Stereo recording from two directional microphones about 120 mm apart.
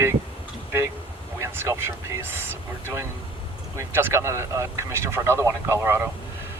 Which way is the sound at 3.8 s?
20° right (ahead or behind).